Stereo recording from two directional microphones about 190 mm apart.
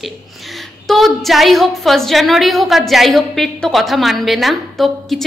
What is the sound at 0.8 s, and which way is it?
A woman's voice, centre (ahead or behind).